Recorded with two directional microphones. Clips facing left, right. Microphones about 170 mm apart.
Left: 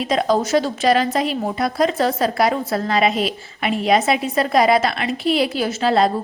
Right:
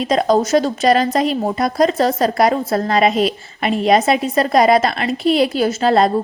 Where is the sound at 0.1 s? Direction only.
40° right (ahead or behind).